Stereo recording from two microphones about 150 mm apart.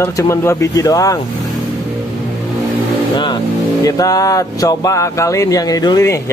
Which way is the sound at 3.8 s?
25° left (ahead or behind).